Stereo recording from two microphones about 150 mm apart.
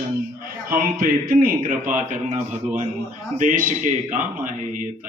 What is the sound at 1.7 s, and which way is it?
A man's voice, 60° right (ahead or behind).